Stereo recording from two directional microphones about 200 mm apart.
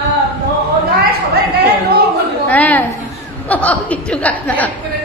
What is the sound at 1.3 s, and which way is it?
Speech, 55° right (ahead or behind).